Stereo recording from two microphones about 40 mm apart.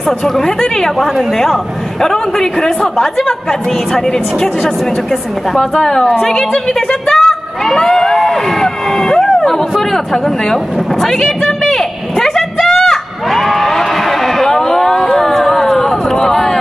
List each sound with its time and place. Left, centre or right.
0.2 s a man's voice: centre
5.5 s a man's voice: centre
11.4 s a sound: centre